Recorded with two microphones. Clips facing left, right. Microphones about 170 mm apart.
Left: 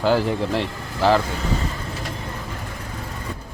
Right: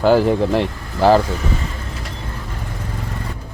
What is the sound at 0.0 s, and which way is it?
Speech, 50° right (ahead or behind).